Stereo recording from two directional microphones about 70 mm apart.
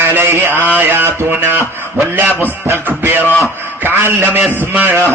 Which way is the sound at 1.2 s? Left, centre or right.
Right.